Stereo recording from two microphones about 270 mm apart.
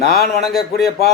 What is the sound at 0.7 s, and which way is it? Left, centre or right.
Speech, left.